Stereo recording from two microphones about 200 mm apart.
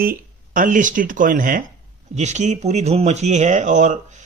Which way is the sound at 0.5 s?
40° right (ahead or behind).